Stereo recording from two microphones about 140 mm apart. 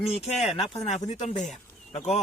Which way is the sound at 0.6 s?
50° left (ahead or behind).